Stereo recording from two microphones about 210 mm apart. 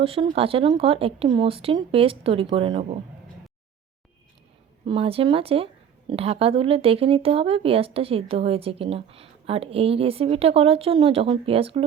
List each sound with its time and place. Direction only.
0.0 s speech: 25° right (ahead or behind)
4.9 s speech: 25° right (ahead or behind)